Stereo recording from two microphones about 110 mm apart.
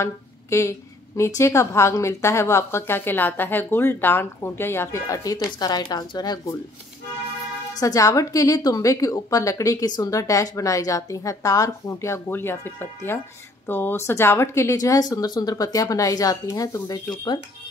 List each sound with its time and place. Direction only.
0.0 s a woman's voice: 25° left (ahead or behind)
7.8 s a woman's voice: 30° left (ahead or behind)